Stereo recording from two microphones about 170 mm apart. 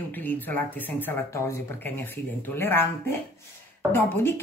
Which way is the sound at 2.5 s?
15° left (ahead or behind).